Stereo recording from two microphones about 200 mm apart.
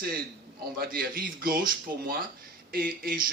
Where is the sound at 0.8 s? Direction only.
45° right (ahead or behind).